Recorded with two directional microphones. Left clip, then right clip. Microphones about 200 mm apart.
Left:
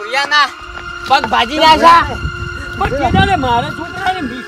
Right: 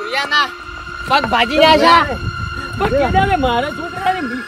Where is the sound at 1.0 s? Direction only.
15° left (ahead or behind).